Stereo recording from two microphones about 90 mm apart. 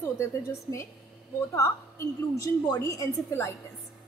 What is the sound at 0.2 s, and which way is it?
A woman's voice, 35° left (ahead or behind).